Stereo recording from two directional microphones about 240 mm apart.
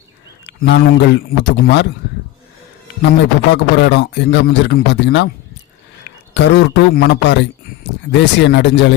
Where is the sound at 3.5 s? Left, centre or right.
Left.